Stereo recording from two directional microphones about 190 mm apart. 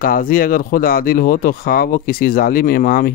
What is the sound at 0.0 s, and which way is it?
Speech, 50° left (ahead or behind).